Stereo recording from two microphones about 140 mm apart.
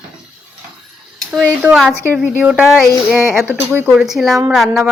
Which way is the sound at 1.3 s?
10° right (ahead or behind).